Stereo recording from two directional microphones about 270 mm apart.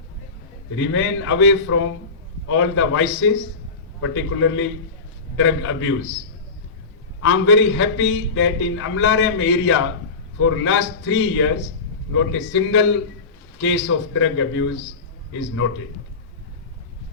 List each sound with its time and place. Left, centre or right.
0.8 s a man's voice: left
7.2 s a man's voice: left